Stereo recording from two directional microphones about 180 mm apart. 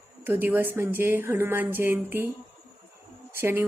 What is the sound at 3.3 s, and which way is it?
Speech, 15° right (ahead or behind).